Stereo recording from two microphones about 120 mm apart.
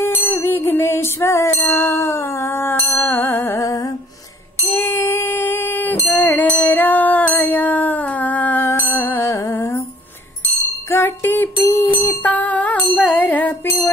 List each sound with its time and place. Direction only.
0.0 s music: 20° left (ahead or behind)
10.9 s music: 20° left (ahead or behind)